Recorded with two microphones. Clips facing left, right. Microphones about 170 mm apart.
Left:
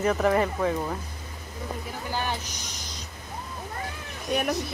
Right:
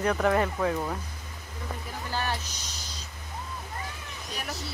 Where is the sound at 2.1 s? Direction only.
15° left (ahead or behind).